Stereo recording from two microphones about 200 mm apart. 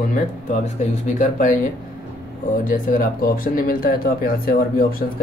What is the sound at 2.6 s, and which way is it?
Speech, 40° left (ahead or behind).